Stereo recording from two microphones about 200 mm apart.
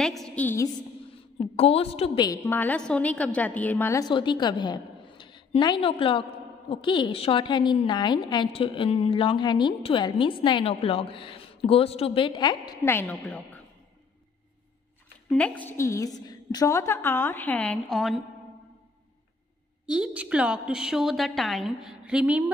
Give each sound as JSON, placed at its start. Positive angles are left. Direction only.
{"t": 0.0, "sound": "a woman's voice", "side_deg": 0}
{"t": 1.4, "sound": "a woman's voice", "side_deg": 30}
{"t": 2.2, "sound": "a woman's voice", "side_deg": 15}
{"t": 15.2, "sound": "a woman's voice", "side_deg": 5}
{"t": 19.9, "sound": "a woman's voice", "side_deg": -5}